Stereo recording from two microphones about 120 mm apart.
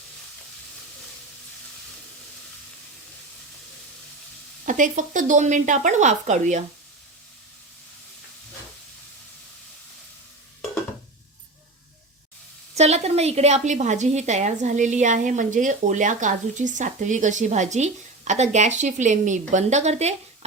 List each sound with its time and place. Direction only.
4.6 s speech: 90° right
12.7 s a woman's voice: 65° right (ahead or behind)